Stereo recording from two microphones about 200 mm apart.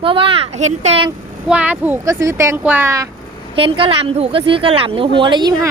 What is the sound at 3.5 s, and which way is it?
Speech, 25° right (ahead or behind).